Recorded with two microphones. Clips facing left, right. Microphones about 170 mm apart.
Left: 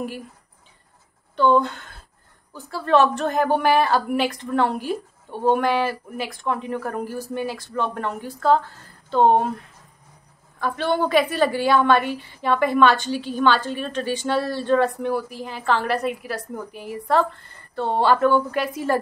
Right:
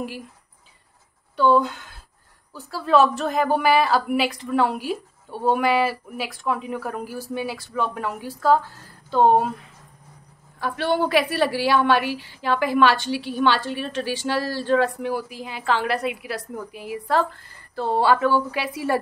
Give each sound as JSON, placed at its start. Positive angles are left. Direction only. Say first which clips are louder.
{"t": 1.4, "sound": "a woman's voice", "louder": "even", "side_deg": -5}
{"t": 10.6, "sound": "a woman's voice", "louder": "even", "side_deg": -5}